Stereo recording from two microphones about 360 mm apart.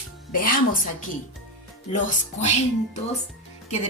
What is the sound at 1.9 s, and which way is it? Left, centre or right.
Speech, centre.